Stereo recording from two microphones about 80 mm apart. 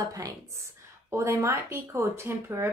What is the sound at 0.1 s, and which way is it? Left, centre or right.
A woman's voice, right.